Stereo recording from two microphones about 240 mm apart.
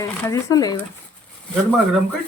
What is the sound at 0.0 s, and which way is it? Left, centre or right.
Speech, centre.